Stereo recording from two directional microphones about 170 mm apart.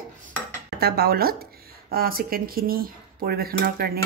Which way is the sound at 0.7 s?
65° right (ahead or behind).